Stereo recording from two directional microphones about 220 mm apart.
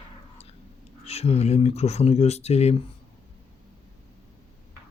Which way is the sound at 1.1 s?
30° left (ahead or behind).